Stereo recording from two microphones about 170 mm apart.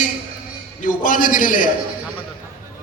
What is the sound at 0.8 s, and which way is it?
Speech, 50° left (ahead or behind).